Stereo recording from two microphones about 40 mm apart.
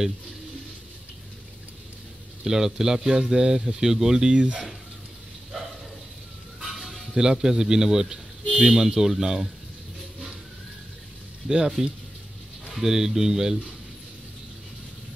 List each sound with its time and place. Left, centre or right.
2.4 s speech: centre
4.4 s speech: right
7.2 s speech: centre
11.4 s speech: centre